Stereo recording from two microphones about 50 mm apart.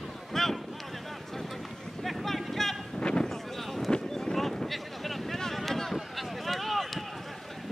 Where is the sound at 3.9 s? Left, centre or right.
Centre.